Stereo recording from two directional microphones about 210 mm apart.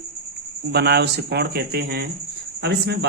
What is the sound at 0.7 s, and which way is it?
Speech, 50° right (ahead or behind).